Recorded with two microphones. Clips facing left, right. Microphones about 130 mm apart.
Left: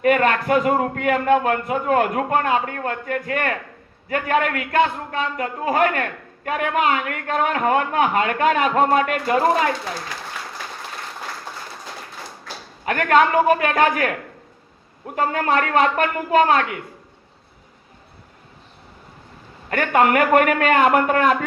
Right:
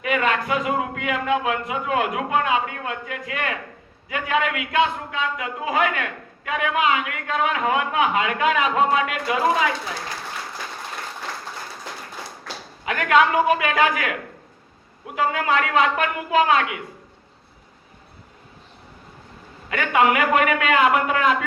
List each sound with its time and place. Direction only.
0.0 s a man's voice: 45° left (ahead or behind)
12.8 s a man's voice: 45° left (ahead or behind)
19.7 s a man's voice: 45° left (ahead or behind)